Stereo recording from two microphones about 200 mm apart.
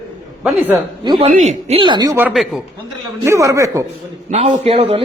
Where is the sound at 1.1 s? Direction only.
30° right (ahead or behind).